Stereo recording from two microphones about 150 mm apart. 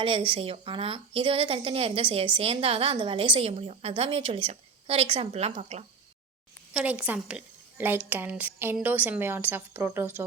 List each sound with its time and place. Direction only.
0.0 s a woman's voice: 35° right (ahead or behind)
6.7 s a woman's voice: 10° right (ahead or behind)